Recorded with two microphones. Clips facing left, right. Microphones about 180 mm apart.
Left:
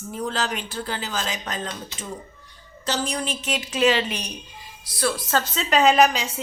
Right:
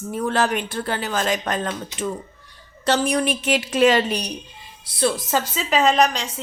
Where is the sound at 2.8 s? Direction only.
60° right (ahead or behind); by 4.3 s 40° right (ahead or behind).